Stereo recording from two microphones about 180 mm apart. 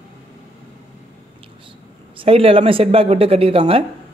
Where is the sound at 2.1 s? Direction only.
30° right (ahead or behind).